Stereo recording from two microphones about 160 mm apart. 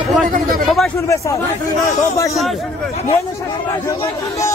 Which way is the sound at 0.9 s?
20° left (ahead or behind).